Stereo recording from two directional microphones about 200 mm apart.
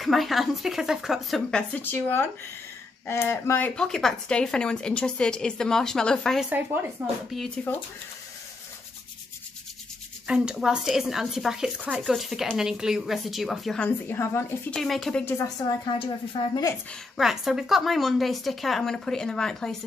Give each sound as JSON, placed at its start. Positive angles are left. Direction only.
{"t": 0.0, "sound": "speech", "side_deg": 0}
{"t": 10.2, "sound": "speech", "side_deg": -5}
{"t": 14.8, "sound": "a woman's voice", "side_deg": 0}
{"t": 17.2, "sound": "speech", "side_deg": 0}